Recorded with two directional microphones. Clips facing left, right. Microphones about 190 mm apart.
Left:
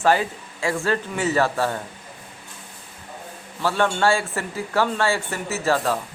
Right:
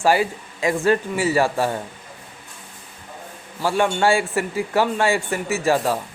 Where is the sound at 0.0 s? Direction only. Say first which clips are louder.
Right 1 dB; 10° right (ahead or behind).